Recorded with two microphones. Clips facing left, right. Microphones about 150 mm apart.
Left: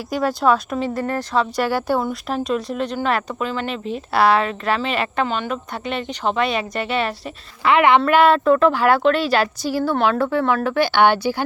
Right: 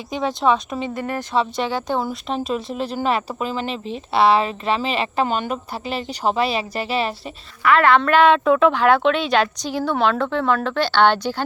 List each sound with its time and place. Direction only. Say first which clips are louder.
0.1 s speech: left 1 dB; 5° left (ahead or behind)
0.9 s speech: right 1 dB; 20° right (ahead or behind)
1.7 s speech: left 2 dB; 5° left (ahead or behind)
3.7 s speech: left 1 dB; 30° right (ahead or behind)
5.3 s a woman's voice: right 1 dB; 40° right (ahead or behind)
5.7 s a woman's voice: left 1 dB; 30° right (ahead or behind)
7.6 s a woman's voice: left 1 dB; 20° left (ahead or behind)
8.0 s speech: even; 5° left (ahead or behind)